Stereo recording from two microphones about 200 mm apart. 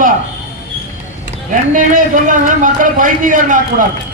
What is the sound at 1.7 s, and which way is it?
A man's voice, 40° right (ahead or behind).